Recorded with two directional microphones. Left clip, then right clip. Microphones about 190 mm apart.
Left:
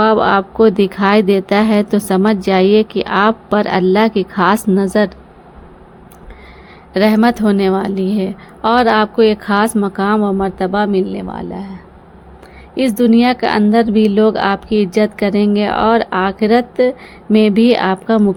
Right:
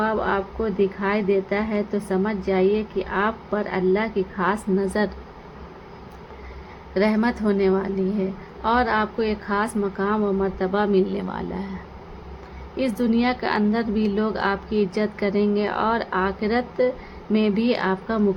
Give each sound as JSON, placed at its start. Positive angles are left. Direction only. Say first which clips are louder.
{"t": 0.0, "sound": "a woman's voice", "louder": "left 11 dB", "side_deg": 60}
{"t": 6.9, "sound": "a woman's voice", "louder": "left 9 dB", "side_deg": 50}
{"t": 12.7, "sound": "a woman's voice", "louder": "left 10 dB", "side_deg": 45}